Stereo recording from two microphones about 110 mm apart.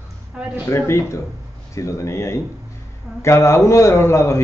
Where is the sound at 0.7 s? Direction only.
25° left (ahead or behind).